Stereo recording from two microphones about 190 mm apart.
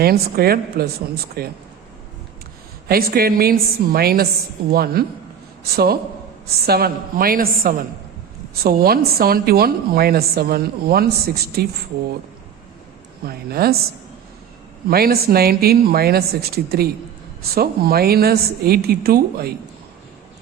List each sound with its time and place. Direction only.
0.0 s a woman's voice: 55° right (ahead or behind)
2.9 s a woman's voice: 50° right (ahead or behind)
13.2 s a woman's voice: 55° right (ahead or behind)
14.8 s speech: 55° right (ahead or behind)